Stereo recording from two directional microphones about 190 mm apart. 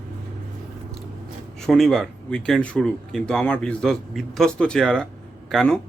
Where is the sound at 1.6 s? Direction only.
Centre (ahead or behind).